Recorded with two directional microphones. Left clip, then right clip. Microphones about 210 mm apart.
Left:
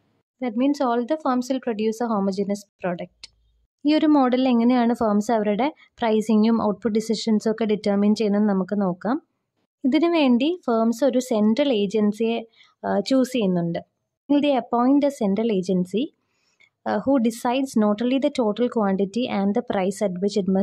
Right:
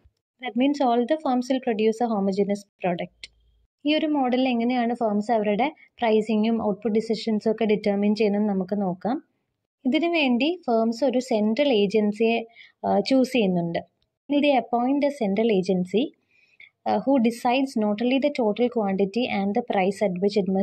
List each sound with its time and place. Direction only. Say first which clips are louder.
0.4 s a woman's voice: left 1 dB; 5° left (ahead or behind)